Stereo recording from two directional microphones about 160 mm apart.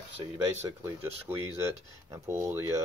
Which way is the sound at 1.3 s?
15° right (ahead or behind).